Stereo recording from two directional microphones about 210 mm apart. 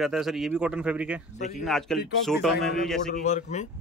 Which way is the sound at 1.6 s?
Centre (ahead or behind).